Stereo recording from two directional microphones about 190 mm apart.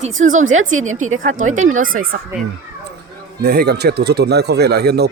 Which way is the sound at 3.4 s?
55° right (ahead or behind).